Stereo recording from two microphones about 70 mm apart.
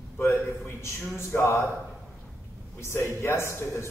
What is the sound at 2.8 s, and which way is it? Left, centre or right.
A man's voice, left.